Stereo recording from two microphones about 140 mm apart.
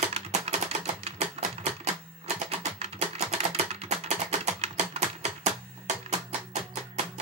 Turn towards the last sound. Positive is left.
turn(degrees=-55)  # may be behind; listen again after turning